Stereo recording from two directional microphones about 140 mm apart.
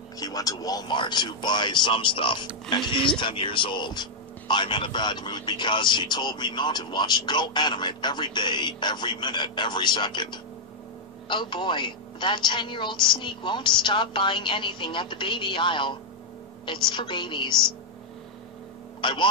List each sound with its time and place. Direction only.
0.2 s speech: 25° left (ahead or behind)
18.9 s speech: 35° left (ahead or behind)